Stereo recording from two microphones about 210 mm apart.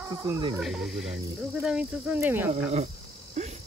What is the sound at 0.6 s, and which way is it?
Speech, centre (ahead or behind).